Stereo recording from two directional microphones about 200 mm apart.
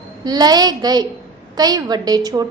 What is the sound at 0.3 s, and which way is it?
A woman's voice, 20° right (ahead or behind).